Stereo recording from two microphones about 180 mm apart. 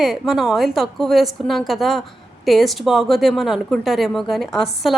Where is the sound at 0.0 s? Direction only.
Centre (ahead or behind).